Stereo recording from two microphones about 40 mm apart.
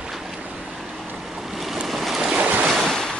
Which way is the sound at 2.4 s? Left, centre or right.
Right.